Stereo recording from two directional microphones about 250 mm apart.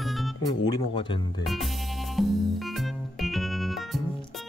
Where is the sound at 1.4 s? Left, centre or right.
Centre.